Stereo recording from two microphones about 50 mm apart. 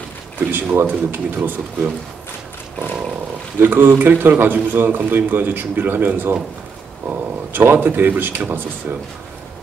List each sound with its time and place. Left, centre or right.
0.4 s a man's voice: right
3.5 s a man's voice: right